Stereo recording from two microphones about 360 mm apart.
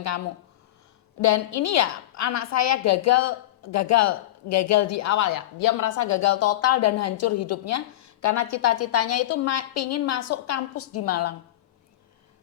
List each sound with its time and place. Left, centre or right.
1.2 s a woman's voice: left